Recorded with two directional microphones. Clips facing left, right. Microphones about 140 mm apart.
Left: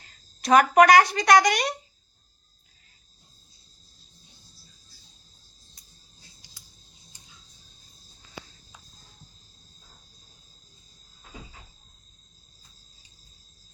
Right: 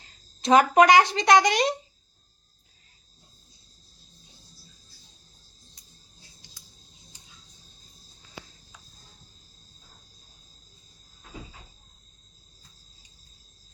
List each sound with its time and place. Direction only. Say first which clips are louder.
0.4 s speech: even; 25° right (ahead or behind)